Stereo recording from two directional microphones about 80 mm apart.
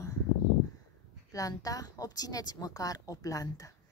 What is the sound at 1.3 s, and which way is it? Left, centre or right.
A woman's voice, left.